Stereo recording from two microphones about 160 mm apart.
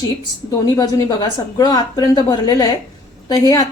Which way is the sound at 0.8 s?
25° left (ahead or behind).